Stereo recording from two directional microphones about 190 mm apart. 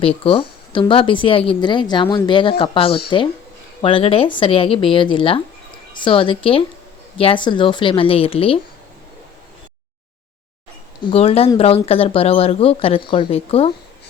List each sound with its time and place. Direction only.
0.0 s a woman's voice: 25° left (ahead or behind)
11.0 s speech: 30° left (ahead or behind)